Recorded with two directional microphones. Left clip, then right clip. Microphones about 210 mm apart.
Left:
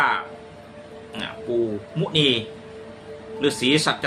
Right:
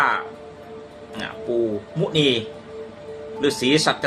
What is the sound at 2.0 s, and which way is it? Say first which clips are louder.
Speech: right 1 dB; centre (ahead or behind).